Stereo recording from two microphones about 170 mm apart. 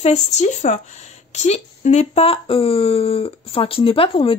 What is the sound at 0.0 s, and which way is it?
Speech, 40° left (ahead or behind).